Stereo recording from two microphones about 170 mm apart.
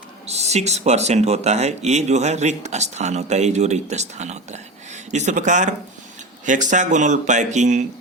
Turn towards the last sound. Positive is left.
turn(degrees=-45)  # may be behind; listen again after turning